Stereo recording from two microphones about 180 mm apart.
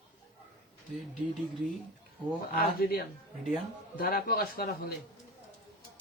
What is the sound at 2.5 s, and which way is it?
Speech, 55° left (ahead or behind).